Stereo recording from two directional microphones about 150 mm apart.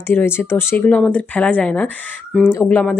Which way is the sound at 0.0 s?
15° left (ahead or behind).